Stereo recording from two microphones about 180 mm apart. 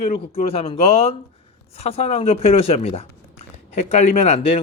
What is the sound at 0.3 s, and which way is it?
Speech, 35° left (ahead or behind).